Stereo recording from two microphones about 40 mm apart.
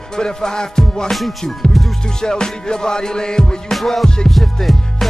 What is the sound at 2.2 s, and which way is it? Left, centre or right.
Music, centre.